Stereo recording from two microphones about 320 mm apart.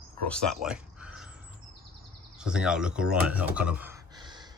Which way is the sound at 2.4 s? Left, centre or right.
Centre.